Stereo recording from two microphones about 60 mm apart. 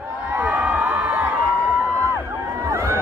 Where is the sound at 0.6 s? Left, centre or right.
Right.